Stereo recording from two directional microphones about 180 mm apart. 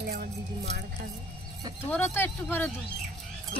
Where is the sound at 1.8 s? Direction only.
15° left (ahead or behind).